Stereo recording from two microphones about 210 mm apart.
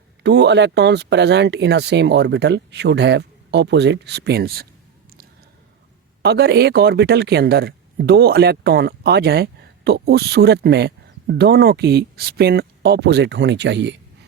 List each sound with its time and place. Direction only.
0.2 s speech: 55° right (ahead or behind)
6.2 s speech: 50° right (ahead or behind)